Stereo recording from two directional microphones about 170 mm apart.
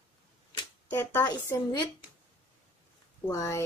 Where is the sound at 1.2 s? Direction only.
25° left (ahead or behind).